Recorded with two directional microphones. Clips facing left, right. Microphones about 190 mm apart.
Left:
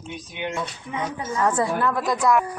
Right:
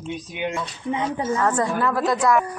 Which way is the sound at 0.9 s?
25° right (ahead or behind).